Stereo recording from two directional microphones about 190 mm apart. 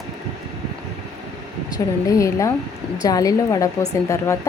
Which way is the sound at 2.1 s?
15° left (ahead or behind).